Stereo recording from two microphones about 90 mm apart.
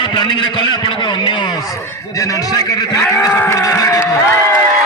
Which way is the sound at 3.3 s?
30° left (ahead or behind).